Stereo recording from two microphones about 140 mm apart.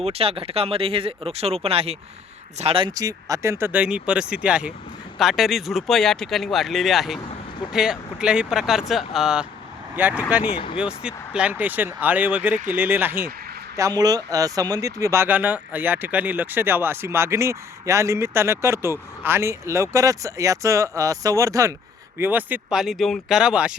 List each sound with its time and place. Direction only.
0.0 s speech: 45° right (ahead or behind)
2.9 s speech: 25° right (ahead or behind); by 10.4 s 10° right (ahead or behind)
10.4 s speech: 40° left (ahead or behind)
10.8 s speech: 5° right (ahead or behind)
13.7 s speech: 25° right (ahead or behind)
22.2 s speech: 15° right (ahead or behind)